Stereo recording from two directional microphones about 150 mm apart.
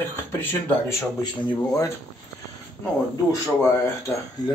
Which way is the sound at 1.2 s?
25° left (ahead or behind).